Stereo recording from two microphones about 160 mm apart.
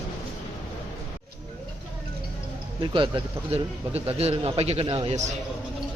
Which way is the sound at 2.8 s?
30° right (ahead or behind).